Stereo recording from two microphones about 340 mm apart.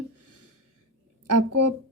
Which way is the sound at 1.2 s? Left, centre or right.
Right.